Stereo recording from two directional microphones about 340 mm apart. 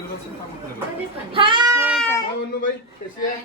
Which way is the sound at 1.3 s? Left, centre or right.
Centre.